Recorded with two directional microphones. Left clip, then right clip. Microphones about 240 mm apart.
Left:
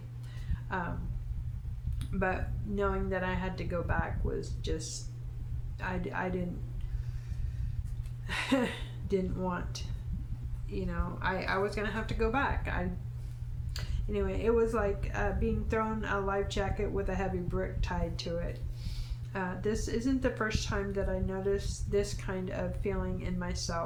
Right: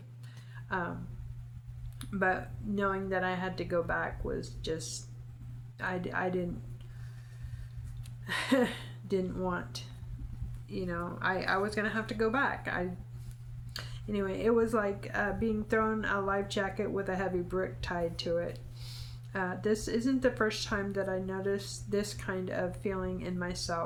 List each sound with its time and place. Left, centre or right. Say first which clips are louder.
2.0 s speech: right 3 dB; centre
8.3 s a woman's voice: right 2 dB; centre